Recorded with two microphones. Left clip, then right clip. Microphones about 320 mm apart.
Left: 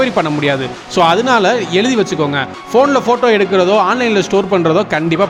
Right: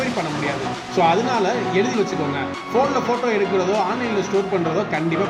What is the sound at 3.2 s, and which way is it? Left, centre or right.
Speech, left.